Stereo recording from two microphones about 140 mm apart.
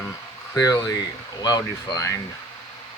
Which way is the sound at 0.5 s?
20° left (ahead or behind).